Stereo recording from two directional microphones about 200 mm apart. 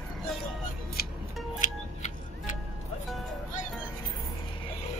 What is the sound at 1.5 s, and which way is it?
Music, 40° left (ahead or behind).